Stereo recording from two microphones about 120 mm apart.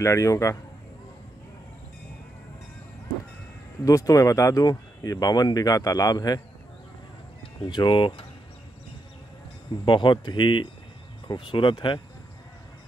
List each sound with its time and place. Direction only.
0.0 s a man's voice: 25° left (ahead or behind)
3.8 s speech: 30° left (ahead or behind)
7.7 s speech: 40° left (ahead or behind)
9.8 s speech: 40° left (ahead or behind)